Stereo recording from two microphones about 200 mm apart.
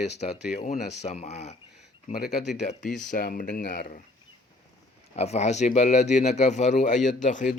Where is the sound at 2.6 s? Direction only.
40° left (ahead or behind).